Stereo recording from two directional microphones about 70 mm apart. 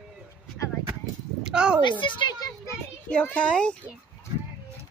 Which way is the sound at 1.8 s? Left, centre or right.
Left.